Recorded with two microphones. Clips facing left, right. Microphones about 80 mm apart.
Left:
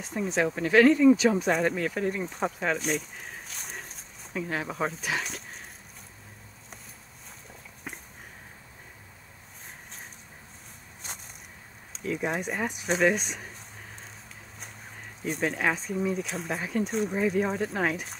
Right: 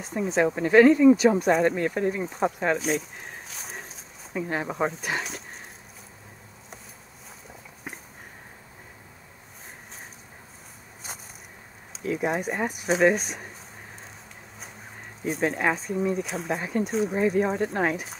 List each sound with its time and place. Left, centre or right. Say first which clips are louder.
0.0 s speech: right 3 dB; centre
0.5 s speech: right 3 dB; right
0.7 s speech: right 3 dB; centre
2.2 s a sound: right 4 dB; centre
4.4 s speech: right 3 dB; centre
7.9 s a sound: right 1 dB; centre
11.1 s a sound: right 2 dB; centre
11.9 s speech: right 3 dB; centre
15.2 s speech: right 3 dB; centre